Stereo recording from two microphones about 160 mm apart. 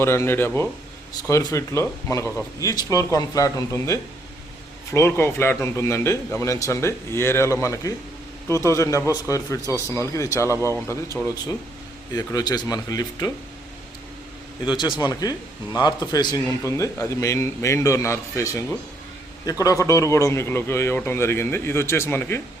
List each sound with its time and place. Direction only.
0.0 s a man's voice: 15° left (ahead or behind)
14.6 s a man's voice: 30° left (ahead or behind)